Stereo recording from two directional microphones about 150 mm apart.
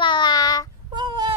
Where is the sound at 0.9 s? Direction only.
30° right (ahead or behind).